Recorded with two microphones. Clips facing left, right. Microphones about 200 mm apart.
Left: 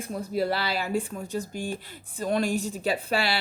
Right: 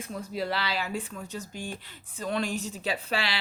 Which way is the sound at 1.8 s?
10° left (ahead or behind).